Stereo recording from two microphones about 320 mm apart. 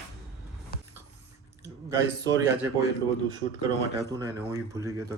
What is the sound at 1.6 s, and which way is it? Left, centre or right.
Speech, centre.